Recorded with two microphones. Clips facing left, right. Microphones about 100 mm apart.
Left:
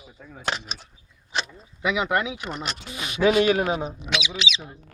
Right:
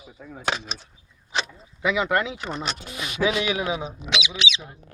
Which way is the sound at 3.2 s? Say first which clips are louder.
Left 5 dB; 45° left (ahead or behind).